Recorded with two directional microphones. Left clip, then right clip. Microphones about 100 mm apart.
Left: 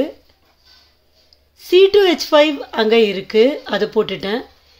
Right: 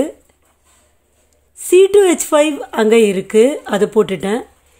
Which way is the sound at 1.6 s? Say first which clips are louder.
Right 2 dB; 40° right (ahead or behind).